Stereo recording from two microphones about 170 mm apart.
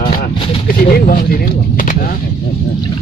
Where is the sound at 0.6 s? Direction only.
60° left (ahead or behind).